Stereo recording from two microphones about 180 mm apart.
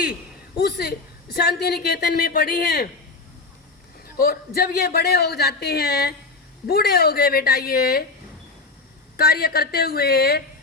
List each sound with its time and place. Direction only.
0.5 s a woman's voice: 65° left (ahead or behind)
4.2 s a woman's voice: 55° left (ahead or behind)
9.1 s a woman's voice: 60° left (ahead or behind)